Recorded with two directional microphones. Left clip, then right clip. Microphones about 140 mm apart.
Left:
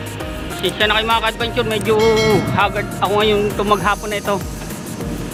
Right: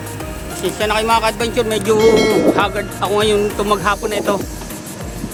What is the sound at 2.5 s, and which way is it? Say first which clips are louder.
Speech: even; 25° right (ahead or behind).